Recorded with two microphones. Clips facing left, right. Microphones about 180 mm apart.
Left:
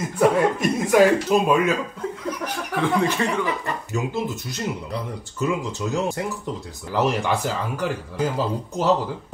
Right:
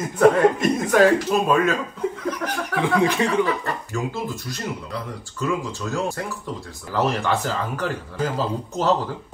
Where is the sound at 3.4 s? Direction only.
20° left (ahead or behind).